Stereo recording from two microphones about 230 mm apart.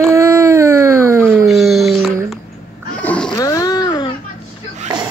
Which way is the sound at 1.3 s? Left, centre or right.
Centre.